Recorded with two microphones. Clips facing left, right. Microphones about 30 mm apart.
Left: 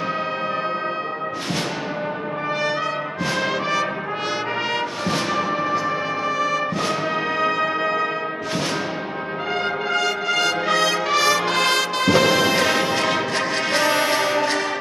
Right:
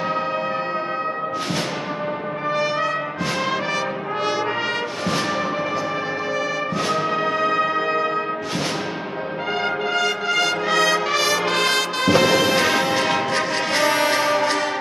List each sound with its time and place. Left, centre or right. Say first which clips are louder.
7.3 s music: even; centre
9.9 s music: even; centre
13.9 s music: right 1 dB; centre
14.3 s music: right 1 dB; centre